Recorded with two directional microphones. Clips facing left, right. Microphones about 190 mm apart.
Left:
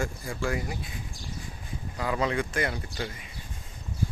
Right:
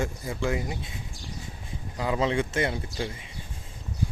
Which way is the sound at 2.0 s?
20° right (ahead or behind).